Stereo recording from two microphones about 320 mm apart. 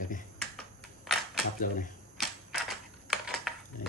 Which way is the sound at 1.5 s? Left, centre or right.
Left.